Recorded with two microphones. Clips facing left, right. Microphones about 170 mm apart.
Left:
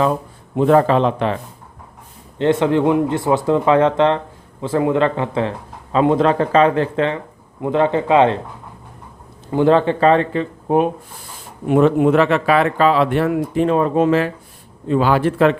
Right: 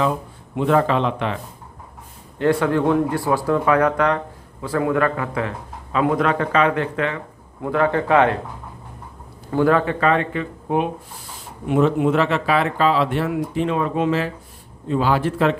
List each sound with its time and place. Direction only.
0.5 s speech: 40° left (ahead or behind)
2.4 s speech: 20° left (ahead or behind)
9.5 s speech: 20° left (ahead or behind)
11.7 s speech: 55° left (ahead or behind)
14.8 s speech: 65° left (ahead or behind)